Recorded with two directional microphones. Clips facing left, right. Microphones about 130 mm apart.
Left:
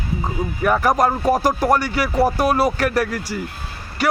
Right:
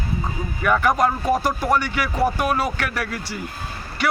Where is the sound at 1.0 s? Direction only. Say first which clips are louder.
Left 3 dB; 40° left (ahead or behind).